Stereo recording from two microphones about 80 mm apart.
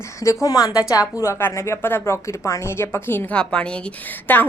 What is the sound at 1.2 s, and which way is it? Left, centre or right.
A woman's voice, left.